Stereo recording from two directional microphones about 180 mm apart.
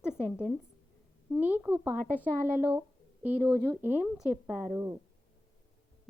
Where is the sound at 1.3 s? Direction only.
10° right (ahead or behind).